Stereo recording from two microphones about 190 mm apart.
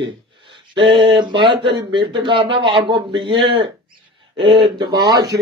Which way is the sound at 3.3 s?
70° right (ahead or behind).